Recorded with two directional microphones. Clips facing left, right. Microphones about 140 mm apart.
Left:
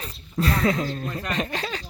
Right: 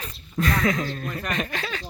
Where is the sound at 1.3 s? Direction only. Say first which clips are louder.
Left 1 dB; 30° left (ahead or behind).